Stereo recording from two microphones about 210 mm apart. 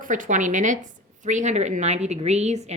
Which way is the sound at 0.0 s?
40° right (ahead or behind).